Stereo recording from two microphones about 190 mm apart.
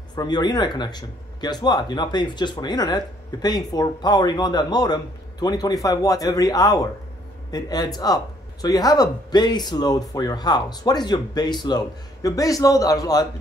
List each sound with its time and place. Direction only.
0.1 s speech: 20° left (ahead or behind)